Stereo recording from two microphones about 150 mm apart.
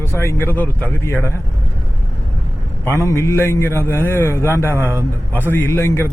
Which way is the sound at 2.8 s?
20° left (ahead or behind).